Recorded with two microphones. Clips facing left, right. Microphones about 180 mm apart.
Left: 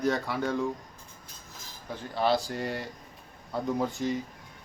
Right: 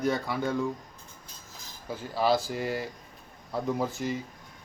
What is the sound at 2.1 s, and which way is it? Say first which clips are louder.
Speech: right 1 dB; 5° right (ahead or behind).